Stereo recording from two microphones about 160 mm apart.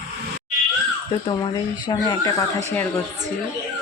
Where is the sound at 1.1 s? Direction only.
25° left (ahead or behind).